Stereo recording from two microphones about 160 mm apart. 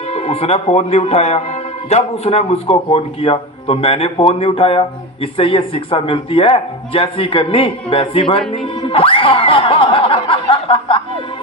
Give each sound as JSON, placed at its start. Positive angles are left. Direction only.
{"t": 0.1, "sound": "a man's voice", "side_deg": 40}
{"t": 8.8, "sound": "music", "side_deg": 35}
{"t": 10.2, "sound": "chuckle", "side_deg": 35}